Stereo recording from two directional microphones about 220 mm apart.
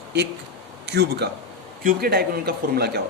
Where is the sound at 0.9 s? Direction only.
50° right (ahead or behind).